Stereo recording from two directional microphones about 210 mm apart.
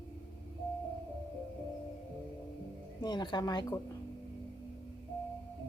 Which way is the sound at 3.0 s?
20° left (ahead or behind).